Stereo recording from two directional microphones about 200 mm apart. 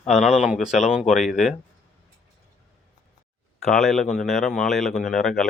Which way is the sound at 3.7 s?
5° left (ahead or behind).